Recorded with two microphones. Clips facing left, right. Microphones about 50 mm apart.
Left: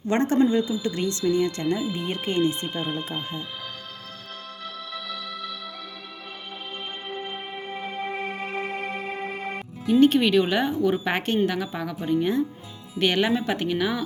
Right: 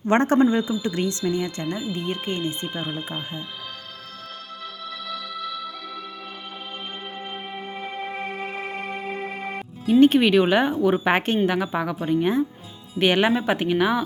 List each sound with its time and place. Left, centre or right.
0.1 s speech: right
0.8 s speech: right
1.2 s speech: centre
4.6 s music: centre
7.1 s music: centre
9.9 s speech: right